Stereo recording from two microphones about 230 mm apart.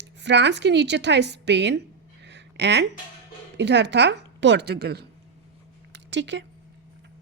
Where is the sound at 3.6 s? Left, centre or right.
Right.